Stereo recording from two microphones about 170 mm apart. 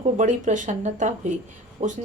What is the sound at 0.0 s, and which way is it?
Speech, 45° right (ahead or behind).